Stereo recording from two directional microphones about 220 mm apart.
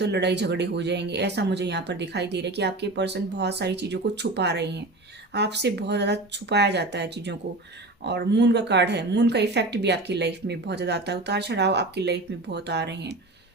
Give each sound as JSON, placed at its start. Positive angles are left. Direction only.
{"t": 0.0, "sound": "speech", "side_deg": -50}